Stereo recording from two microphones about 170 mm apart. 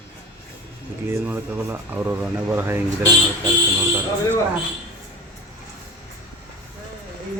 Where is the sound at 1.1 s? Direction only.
15° right (ahead or behind).